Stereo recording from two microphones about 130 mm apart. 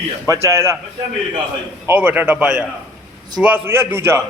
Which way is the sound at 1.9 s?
15° right (ahead or behind).